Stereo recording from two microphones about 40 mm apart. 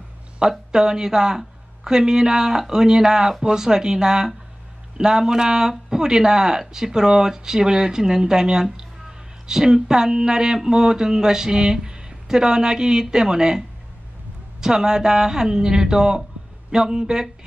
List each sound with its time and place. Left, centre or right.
0.4 s speech: centre